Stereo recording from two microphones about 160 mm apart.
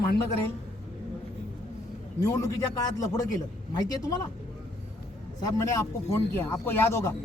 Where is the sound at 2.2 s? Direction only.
20° left (ahead or behind).